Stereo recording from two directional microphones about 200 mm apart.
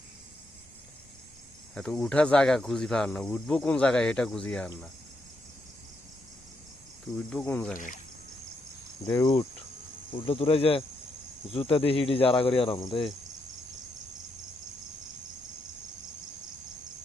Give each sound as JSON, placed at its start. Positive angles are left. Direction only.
{"t": 1.7, "sound": "speech", "side_deg": 5}
{"t": 7.2, "sound": "speech", "side_deg": 5}
{"t": 9.0, "sound": "speech", "side_deg": 15}
{"t": 10.1, "sound": "speech", "side_deg": 25}